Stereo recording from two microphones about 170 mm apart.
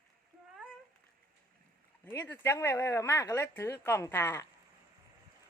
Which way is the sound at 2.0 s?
15° left (ahead or behind).